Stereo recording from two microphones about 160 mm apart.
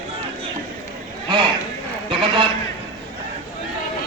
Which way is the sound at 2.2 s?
30° right (ahead or behind).